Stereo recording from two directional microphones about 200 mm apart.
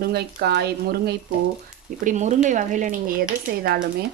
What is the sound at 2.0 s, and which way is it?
Speech, 35° right (ahead or behind).